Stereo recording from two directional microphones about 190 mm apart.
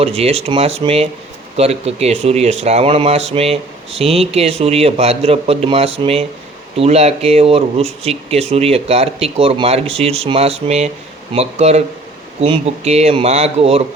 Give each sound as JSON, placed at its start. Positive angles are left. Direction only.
{"t": 0.0, "sound": "speech", "side_deg": -30}